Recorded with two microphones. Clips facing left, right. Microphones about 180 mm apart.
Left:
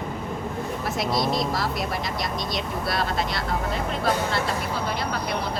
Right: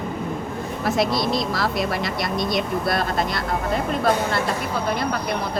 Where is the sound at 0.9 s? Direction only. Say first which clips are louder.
Right 3 dB; 75° right (ahead or behind).